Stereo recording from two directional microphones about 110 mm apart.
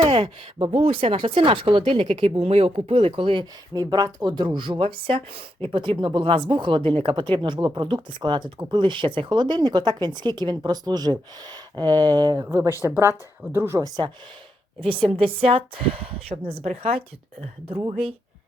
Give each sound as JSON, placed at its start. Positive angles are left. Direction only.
{"t": 0.1, "sound": "speech", "side_deg": -50}
{"t": 2.4, "sound": "speech", "side_deg": -70}
{"t": 3.7, "sound": "speech", "side_deg": -40}
{"t": 14.8, "sound": "speech", "side_deg": -55}